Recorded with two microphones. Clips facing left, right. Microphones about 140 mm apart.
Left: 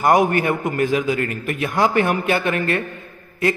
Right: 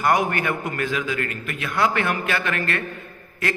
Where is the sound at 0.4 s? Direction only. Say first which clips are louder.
Left 5 dB; 35° left (ahead or behind).